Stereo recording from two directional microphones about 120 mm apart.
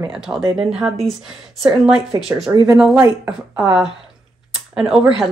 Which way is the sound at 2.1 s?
30° right (ahead or behind).